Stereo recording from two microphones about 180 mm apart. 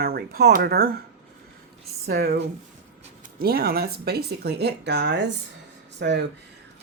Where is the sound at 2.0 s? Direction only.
60° right (ahead or behind).